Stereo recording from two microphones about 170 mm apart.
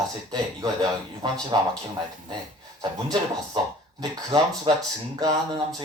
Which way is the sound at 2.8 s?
25° right (ahead or behind).